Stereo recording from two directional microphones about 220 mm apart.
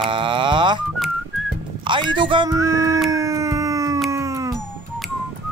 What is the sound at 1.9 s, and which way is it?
Speech, 20° right (ahead or behind).